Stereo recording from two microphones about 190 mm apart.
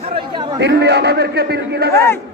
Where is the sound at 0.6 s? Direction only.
60° right (ahead or behind).